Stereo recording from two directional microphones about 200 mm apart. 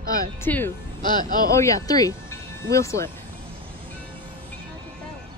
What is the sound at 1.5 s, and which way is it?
Speech, 15° left (ahead or behind).